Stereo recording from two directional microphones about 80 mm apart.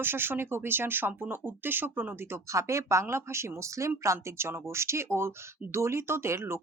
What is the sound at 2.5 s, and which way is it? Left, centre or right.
Speech, right.